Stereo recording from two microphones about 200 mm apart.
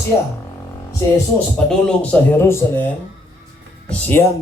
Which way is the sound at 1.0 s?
15° left (ahead or behind).